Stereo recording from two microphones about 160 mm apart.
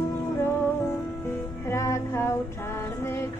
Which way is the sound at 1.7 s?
15° left (ahead or behind).